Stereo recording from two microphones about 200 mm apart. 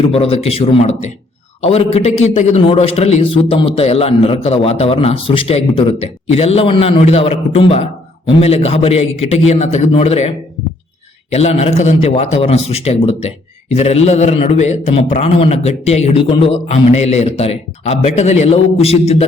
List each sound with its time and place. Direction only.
0.0 s a man's voice: 30° left (ahead or behind)